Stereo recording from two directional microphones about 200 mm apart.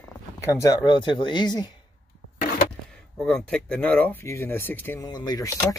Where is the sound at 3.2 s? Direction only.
5° left (ahead or behind).